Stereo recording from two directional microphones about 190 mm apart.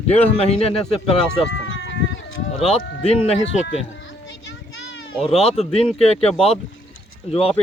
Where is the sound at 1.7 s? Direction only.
65° left (ahead or behind).